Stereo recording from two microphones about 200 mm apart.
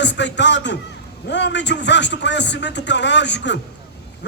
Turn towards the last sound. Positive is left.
turn(degrees=60)  # may be behind; listen again after turning